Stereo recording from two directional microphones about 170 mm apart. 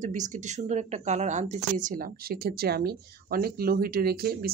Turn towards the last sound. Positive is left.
turn(degrees=-65)  # may be behind; listen again after turning